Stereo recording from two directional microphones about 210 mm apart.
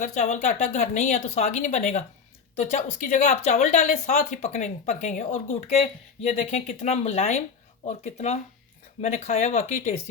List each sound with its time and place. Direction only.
0.0 s a woman's voice: 35° left (ahead or behind)